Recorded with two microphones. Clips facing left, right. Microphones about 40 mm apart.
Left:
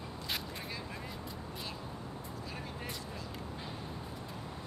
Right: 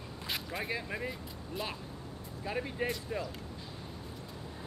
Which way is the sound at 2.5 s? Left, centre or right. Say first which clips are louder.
Right 13 dB; right.